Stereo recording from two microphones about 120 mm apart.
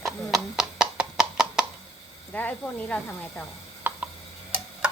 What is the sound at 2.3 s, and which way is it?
Speech, 15° left (ahead or behind).